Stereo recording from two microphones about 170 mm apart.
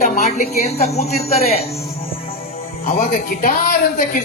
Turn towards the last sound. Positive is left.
turn(degrees=55)  # may be behind; listen again after turning